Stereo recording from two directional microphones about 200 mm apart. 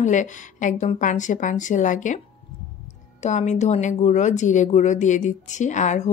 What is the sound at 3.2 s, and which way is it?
Speech, 35° left (ahead or behind).